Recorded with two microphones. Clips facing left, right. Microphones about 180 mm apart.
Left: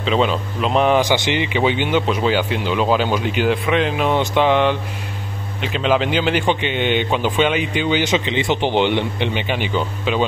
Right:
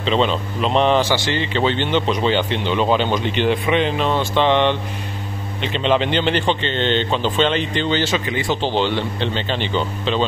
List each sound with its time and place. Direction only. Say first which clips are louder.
0.0 s a man's voice: even; 5° left (ahead or behind)
4.1 s a man's voice: left 1 dB; 15° left (ahead or behind)
4.5 s a man's voice: even; 5° left (ahead or behind)